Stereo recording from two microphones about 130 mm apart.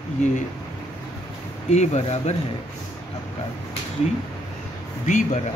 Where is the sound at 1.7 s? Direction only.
55° left (ahead or behind).